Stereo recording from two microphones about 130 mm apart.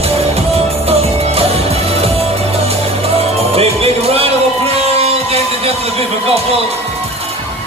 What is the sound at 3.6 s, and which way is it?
Music, 50° right (ahead or behind).